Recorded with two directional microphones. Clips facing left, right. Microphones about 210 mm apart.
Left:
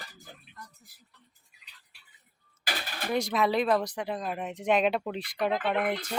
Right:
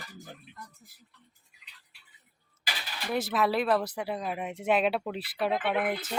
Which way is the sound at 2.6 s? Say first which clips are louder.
Left 4 dB; 50° left (ahead or behind).